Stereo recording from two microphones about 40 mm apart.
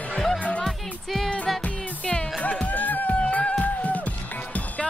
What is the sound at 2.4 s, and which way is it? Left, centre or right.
Music, left.